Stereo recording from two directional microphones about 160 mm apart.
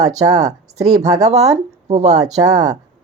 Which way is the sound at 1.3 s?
45° right (ahead or behind).